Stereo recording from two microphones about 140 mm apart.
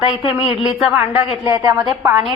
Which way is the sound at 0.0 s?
40° left (ahead or behind).